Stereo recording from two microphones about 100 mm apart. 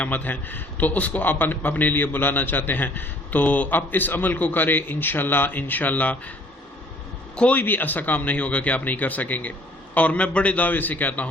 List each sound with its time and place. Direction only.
0.0 s a man's voice: 15° left (ahead or behind)
7.3 s speech: 15° left (ahead or behind)